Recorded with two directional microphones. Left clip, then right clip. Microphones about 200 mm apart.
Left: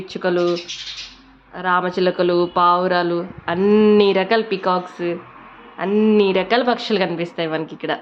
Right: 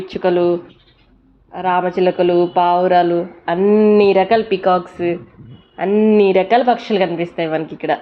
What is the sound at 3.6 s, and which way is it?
Speech, 15° left (ahead or behind).